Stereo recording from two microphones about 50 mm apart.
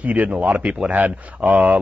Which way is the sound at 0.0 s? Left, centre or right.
Right.